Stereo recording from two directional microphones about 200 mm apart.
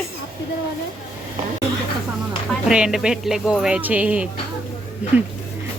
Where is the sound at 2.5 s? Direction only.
5° right (ahead or behind).